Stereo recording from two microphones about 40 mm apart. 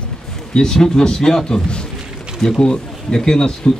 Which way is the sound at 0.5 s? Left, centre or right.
Centre.